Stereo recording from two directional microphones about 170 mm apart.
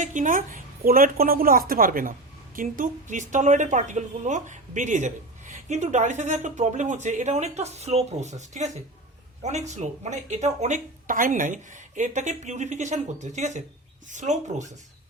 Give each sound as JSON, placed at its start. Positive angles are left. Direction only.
{"t": 0.0, "sound": "a woman's voice", "side_deg": -45}